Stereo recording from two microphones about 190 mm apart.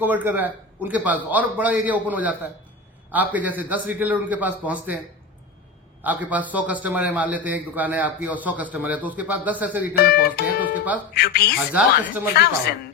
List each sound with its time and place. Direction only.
0.0 s a man's voice: 10° right (ahead or behind)
6.0 s a man's voice: 10° right (ahead or behind)
9.9 s speech: 55° left (ahead or behind)
11.7 s a man's voice: 5° right (ahead or behind)